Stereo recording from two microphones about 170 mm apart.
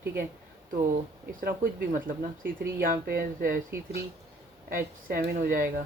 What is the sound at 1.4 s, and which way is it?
Speech, 55° right (ahead or behind).